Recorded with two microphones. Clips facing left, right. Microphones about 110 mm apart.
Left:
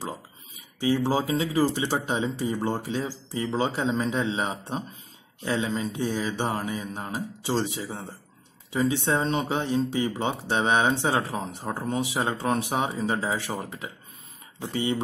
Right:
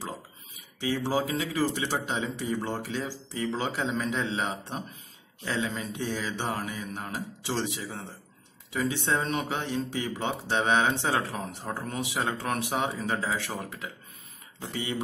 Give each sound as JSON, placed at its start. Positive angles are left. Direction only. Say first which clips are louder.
{"t": 1.1, "sound": "speech", "louder": "left 4 dB", "side_deg": 25}